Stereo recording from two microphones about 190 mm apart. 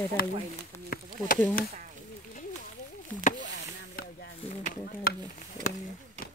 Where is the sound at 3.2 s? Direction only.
40° left (ahead or behind).